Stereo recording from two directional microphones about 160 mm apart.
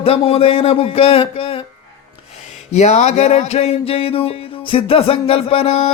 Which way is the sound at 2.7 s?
45° left (ahead or behind).